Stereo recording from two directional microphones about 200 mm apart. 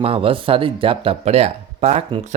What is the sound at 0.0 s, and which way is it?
Speech, 30° right (ahead or behind).